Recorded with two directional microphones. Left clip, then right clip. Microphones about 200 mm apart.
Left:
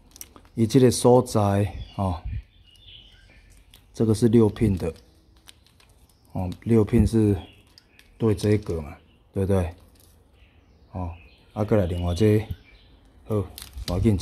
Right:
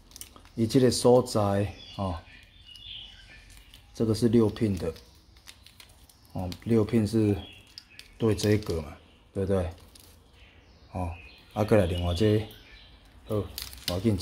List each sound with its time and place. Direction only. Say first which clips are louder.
0.1 s speech: left 4 dB; 30° left (ahead or behind)
3.7 s speech: left 4 dB; 35° left (ahead or behind)
6.3 s speech: left 4 dB; 20° left (ahead or behind)
9.3 s speech: left 3 dB; 35° left (ahead or behind)
10.9 s speech: right 1 dB; 10° left (ahead or behind)
12.1 s speech: left 4 dB; 25° left (ahead or behind)
13.9 s speech: left 5 dB; 30° left (ahead or behind)